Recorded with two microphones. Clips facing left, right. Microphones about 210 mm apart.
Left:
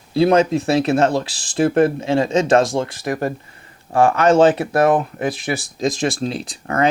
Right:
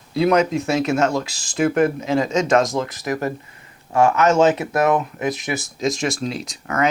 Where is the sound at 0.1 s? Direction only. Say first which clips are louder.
Left 3 dB; 30° left (ahead or behind).